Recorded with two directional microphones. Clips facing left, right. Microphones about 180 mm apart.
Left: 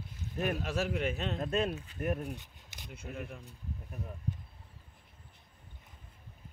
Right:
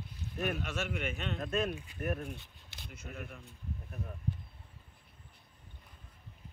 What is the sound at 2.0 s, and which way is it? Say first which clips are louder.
Speech: left 2 dB; 20° left (ahead or behind).